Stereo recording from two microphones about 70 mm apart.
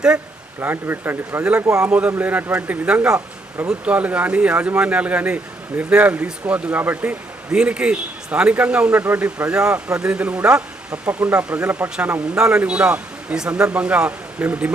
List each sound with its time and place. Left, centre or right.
0.6 s speech: right
1.8 s speech: centre
12.4 s speech: centre